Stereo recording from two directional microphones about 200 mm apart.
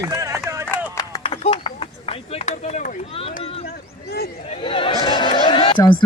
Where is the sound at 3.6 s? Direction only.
50° left (ahead or behind).